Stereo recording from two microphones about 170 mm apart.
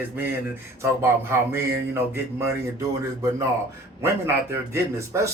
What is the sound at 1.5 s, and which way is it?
Speech, 15° right (ahead or behind).